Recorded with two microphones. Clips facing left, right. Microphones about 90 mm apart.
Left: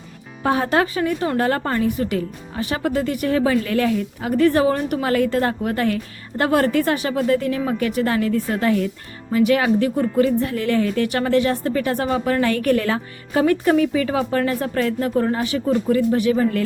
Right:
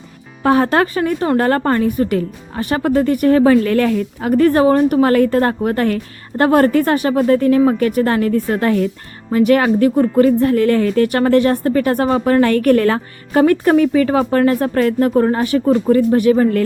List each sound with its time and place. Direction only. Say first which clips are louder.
0.4 s a woman's voice: right 5 dB; 60° right (ahead or behind)